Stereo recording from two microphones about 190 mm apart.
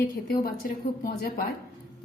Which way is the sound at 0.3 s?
50° left (ahead or behind).